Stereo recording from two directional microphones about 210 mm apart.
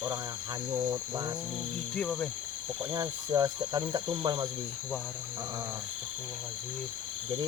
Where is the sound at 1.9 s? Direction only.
5° left (ahead or behind).